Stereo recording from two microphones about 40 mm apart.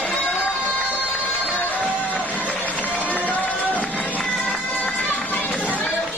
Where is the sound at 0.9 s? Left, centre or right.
Left.